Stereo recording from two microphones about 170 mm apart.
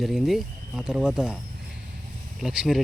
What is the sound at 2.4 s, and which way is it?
Speech, 5° right (ahead or behind).